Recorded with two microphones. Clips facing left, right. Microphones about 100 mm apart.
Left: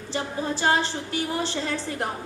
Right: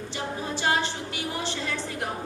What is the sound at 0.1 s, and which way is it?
A woman's voice, 35° left (ahead or behind).